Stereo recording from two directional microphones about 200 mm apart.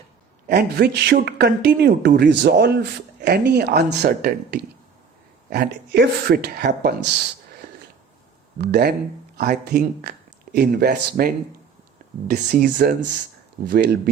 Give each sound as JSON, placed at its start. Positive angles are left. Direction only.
{"t": 0.4, "sound": "speech", "side_deg": -50}
{"t": 8.5, "sound": "speech", "side_deg": -55}
{"t": 12.3, "sound": "speech", "side_deg": -45}
{"t": 13.7, "sound": "speech", "side_deg": -55}